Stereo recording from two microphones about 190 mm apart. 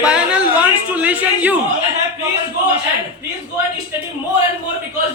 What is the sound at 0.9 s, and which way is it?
Speech, 10° right (ahead or behind).